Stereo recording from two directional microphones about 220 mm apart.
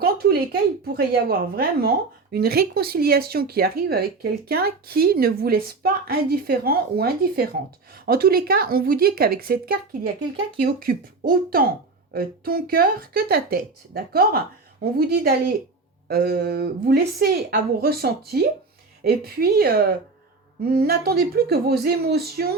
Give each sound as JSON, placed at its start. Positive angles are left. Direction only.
{"t": 0.0, "sound": "speech", "side_deg": -45}